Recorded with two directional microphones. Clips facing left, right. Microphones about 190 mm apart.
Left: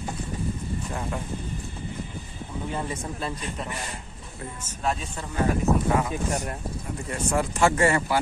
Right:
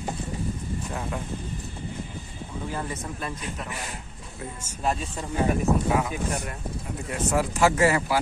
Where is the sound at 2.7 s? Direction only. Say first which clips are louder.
Left 2 dB; 25° left (ahead or behind).